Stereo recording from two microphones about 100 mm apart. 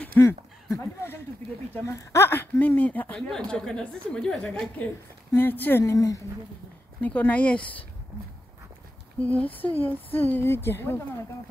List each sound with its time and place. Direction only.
0.2 s a woman's voice: 25° left (ahead or behind)
3.2 s a woman's voice: 5° left (ahead or behind)
5.3 s a woman's voice: 20° left (ahead or behind)
7.0 s a woman's voice: 15° left (ahead or behind)
9.2 s a woman's voice: 15° left (ahead or behind)